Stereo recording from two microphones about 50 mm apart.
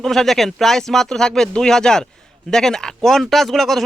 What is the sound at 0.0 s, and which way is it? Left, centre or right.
Speech, centre.